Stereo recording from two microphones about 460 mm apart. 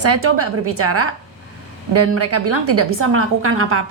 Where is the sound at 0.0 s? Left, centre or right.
Right.